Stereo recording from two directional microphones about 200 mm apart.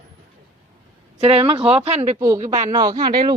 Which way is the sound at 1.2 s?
30° right (ahead or behind).